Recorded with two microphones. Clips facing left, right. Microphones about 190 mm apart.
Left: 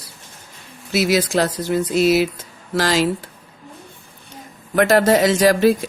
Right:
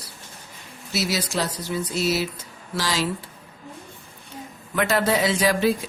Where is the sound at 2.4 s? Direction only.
50° left (ahead or behind).